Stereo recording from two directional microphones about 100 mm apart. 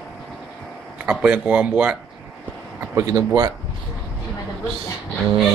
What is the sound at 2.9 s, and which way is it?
Speech, 35° right (ahead or behind).